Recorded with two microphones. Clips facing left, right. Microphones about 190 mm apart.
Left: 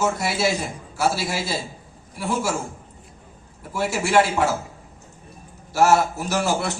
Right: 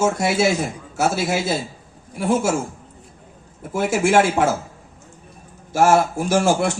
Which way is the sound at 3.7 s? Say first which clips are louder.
Right 3 dB; 50° right (ahead or behind).